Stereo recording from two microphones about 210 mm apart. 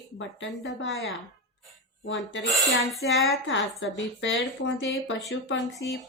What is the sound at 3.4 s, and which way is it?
A woman's voice, 60° left (ahead or behind).